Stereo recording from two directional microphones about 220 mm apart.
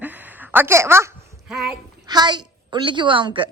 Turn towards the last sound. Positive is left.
turn(degrees=-25)  # may be behind; listen again after turning